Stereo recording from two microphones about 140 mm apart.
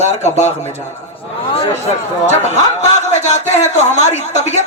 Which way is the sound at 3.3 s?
55° left (ahead or behind).